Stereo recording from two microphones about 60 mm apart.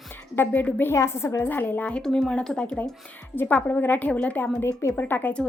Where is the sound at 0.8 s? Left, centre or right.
Left.